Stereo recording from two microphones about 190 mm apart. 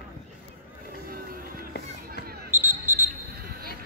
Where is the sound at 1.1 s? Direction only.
50° right (ahead or behind).